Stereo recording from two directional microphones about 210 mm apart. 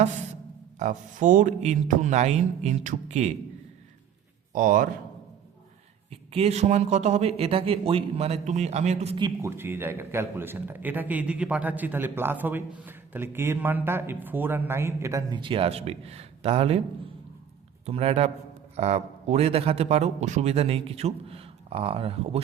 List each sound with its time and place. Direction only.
0.8 s speech: 35° right (ahead or behind)
4.5 s speech: 40° right (ahead or behind)
6.1 s a man's voice: 30° right (ahead or behind)
9.1 s a man's voice: 15° right (ahead or behind)
17.8 s a man's voice: 30° right (ahead or behind)